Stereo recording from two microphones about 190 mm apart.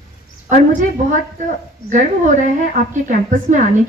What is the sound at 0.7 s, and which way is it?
A woman's voice, 40° right (ahead or behind).